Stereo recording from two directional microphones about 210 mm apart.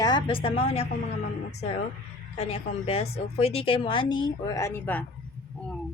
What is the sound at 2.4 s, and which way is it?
A woman's voice, 30° left (ahead or behind).